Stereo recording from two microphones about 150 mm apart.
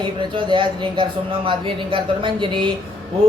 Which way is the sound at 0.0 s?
30° right (ahead or behind).